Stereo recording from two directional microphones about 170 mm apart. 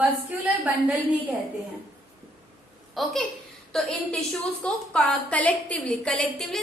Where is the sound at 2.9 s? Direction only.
Centre (ahead or behind).